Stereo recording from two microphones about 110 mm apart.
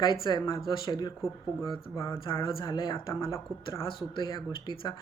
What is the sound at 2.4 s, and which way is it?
Speech, 45° left (ahead or behind).